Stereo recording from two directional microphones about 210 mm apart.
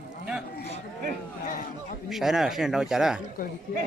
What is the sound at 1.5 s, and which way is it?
Speech, 40° left (ahead or behind).